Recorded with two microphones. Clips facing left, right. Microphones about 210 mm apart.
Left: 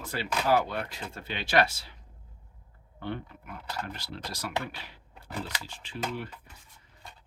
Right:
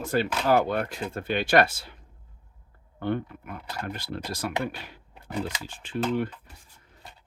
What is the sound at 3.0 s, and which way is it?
Speech, 50° right (ahead or behind).